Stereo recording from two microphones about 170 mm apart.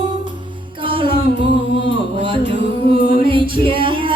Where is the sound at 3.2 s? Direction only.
30° right (ahead or behind).